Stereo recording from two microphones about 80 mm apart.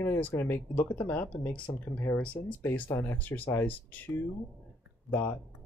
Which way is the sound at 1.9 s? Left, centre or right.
Left.